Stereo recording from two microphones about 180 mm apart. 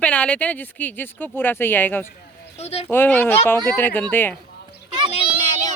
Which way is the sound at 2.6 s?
35° left (ahead or behind).